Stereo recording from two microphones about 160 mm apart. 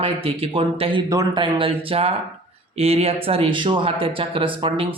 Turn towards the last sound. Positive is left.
turn(degrees=-35)  # may be behind; listen again after turning